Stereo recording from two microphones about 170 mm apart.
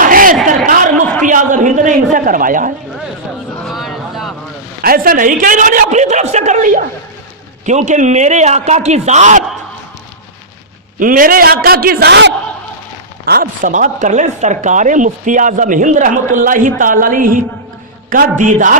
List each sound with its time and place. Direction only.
0.0 s a sound: 55° right (ahead or behind)
3.6 s vehicle: centre (ahead or behind)
4.8 s speech: 60° right (ahead or behind)
11.0 s a man's voice: 55° right (ahead or behind); by 12.3 s 80° right
13.2 s speech: 60° right (ahead or behind)